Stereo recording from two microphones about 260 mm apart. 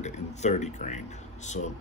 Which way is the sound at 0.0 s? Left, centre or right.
Left.